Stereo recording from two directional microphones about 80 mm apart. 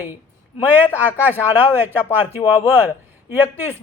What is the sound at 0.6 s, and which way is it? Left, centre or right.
Speech, right.